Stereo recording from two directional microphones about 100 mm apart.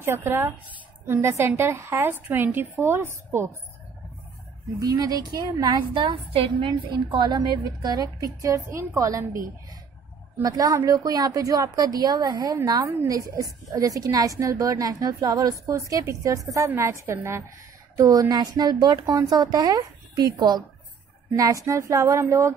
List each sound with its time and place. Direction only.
0.0 s a woman's voice: 25° right (ahead or behind)
4.7 s a woman's voice: 40° right (ahead or behind)
6.3 s a woman's voice: 65° right (ahead or behind); by 9.4 s 35° right (ahead or behind)
10.4 s a woman's voice: 35° right (ahead or behind)